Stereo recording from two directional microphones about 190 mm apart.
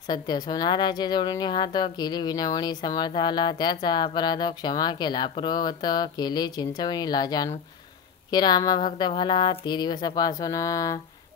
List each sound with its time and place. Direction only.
0.1 s a woman's voice: 20° left (ahead or behind)